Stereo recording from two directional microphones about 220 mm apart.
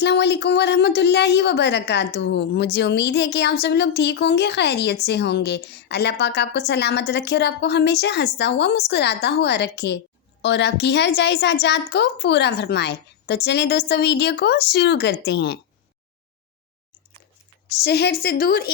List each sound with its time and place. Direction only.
0.0 s a woman's voice: 50° left (ahead or behind)
17.8 s a woman's voice: 45° left (ahead or behind)